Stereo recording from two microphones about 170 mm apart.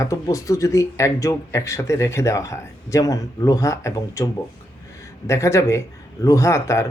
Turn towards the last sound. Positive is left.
turn(degrees=15)  # may be behind; listen again after turning